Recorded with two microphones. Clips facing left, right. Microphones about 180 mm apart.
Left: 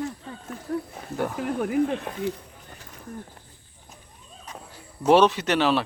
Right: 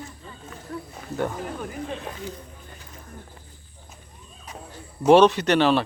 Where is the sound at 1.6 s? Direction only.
65° left (ahead or behind).